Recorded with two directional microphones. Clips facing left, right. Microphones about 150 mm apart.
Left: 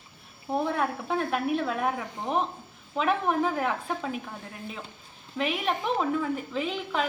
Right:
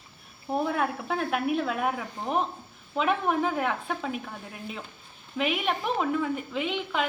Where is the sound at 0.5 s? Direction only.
5° right (ahead or behind).